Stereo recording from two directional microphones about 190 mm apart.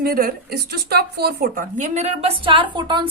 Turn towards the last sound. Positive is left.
turn(degrees=-25)  # may be behind; listen again after turning